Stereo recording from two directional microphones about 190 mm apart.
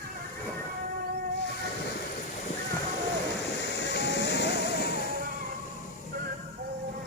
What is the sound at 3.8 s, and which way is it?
Music, 65° left (ahead or behind).